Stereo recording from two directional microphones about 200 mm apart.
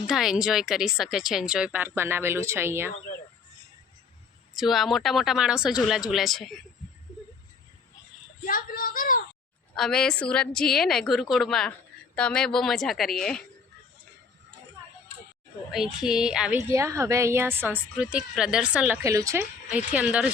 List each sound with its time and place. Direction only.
0.1 s speech: centre (ahead or behind)
4.5 s speech: centre (ahead or behind)
8.4 s a woman's voice: 45° left (ahead or behind)
9.7 s speech: 5° left (ahead or behind)
16.0 s speech: 5° right (ahead or behind)
16.7 s speech: 15° right (ahead or behind)